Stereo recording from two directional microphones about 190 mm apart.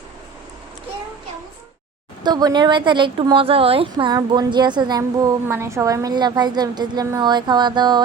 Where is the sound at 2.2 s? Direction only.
20° right (ahead or behind).